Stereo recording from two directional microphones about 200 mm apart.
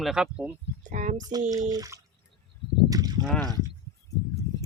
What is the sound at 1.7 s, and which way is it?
Drip, 20° right (ahead or behind).